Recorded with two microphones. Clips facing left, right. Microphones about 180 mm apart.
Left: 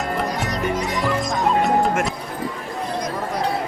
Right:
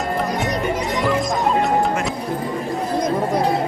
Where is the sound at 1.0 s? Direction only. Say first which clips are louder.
Right 2 dB; centre (ahead or behind).